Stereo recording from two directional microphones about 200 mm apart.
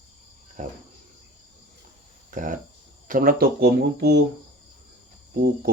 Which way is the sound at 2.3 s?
40° right (ahead or behind).